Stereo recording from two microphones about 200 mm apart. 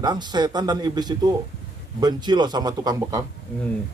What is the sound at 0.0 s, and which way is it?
Speech, 20° right (ahead or behind).